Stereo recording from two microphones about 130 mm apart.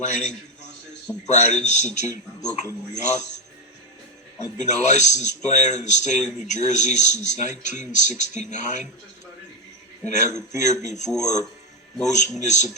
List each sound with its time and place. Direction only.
0.0 s a man's voice: 65° left (ahead or behind)
2.4 s speech: 30° left (ahead or behind)
2.9 s speech: 65° left (ahead or behind)
4.5 s a man's voice: 65° left (ahead or behind)
10.2 s a man's voice: 65° left (ahead or behind)